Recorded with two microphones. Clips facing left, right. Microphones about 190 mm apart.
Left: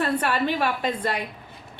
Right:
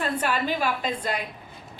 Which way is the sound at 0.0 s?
65° left (ahead or behind).